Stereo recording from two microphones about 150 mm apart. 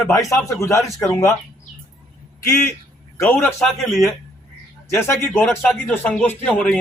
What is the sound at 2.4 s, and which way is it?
A man's voice, 20° left (ahead or behind).